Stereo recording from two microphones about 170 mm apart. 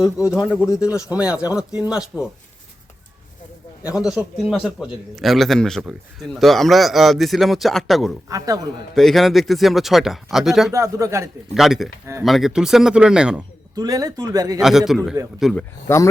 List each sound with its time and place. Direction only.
0.2 s speech: 20° left (ahead or behind)
1.1 s a man's voice: 5° right (ahead or behind)
3.8 s a man's voice: 5° right (ahead or behind)
8.3 s speech: 20° right (ahead or behind)
9.0 s a man's voice: centre (ahead or behind)
10.7 s speech: 20° right (ahead or behind)
11.5 s a man's voice: centre (ahead or behind)
13.7 s speech: 20° right (ahead or behind)
14.6 s a man's voice: centre (ahead or behind)
15.9 s speech: 15° left (ahead or behind)